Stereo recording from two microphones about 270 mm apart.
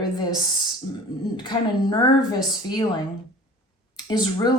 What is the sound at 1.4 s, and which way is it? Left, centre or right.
Speech, centre.